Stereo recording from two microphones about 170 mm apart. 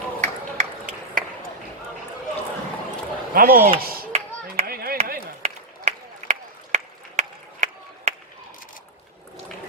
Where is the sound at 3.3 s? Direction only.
60° right (ahead or behind).